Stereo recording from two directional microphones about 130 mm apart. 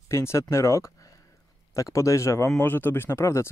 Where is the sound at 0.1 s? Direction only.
20° left (ahead or behind).